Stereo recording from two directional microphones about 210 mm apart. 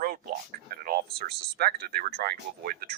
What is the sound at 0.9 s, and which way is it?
Speech, 45° right (ahead or behind).